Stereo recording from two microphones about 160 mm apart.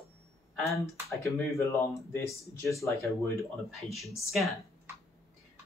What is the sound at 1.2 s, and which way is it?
Speech, 20° left (ahead or behind).